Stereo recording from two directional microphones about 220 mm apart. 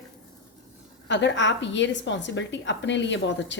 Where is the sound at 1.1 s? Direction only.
55° left (ahead or behind).